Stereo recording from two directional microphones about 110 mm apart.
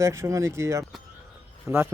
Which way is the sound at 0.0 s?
25° right (ahead or behind).